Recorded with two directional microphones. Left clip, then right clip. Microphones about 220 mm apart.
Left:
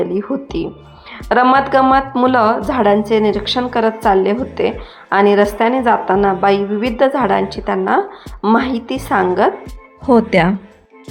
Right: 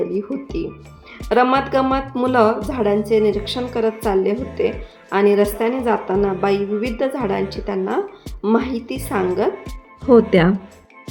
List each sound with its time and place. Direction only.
0.2 s speech: 10° left (ahead or behind)
10.1 s speech: 20° left (ahead or behind)